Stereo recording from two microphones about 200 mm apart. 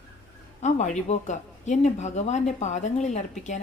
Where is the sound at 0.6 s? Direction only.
35° left (ahead or behind).